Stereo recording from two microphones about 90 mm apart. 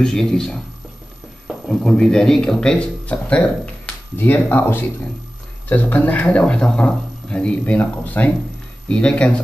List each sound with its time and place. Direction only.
0.0 s speech: 5° left (ahead or behind)
1.7 s a man's voice: 5° left (ahead or behind)